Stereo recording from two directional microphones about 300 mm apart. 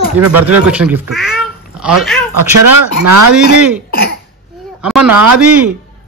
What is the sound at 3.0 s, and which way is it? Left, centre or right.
Speech, right.